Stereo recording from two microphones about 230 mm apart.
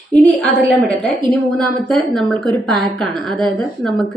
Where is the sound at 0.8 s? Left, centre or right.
Centre.